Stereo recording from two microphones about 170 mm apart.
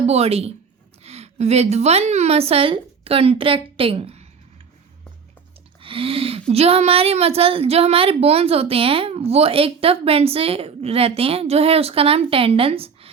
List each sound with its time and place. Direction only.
0.1 s a woman's voice: 35° right (ahead or behind)
5.8 s a sound: 30° right (ahead or behind)
6.5 s a woman's voice: 35° right (ahead or behind)